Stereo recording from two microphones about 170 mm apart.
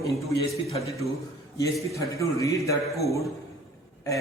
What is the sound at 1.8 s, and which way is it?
A man's voice, 20° left (ahead or behind).